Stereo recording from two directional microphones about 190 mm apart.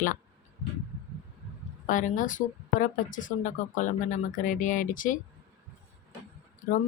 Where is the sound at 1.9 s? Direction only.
45° left (ahead or behind).